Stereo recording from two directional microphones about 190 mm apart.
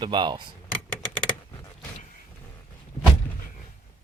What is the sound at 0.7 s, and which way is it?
Typing, 5° left (ahead or behind).